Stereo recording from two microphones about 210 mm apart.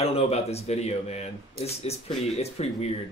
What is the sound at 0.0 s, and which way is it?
Speech, 30° left (ahead or behind).